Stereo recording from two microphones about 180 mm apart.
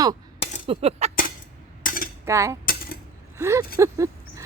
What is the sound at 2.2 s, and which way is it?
Cutlery, 15° right (ahead or behind).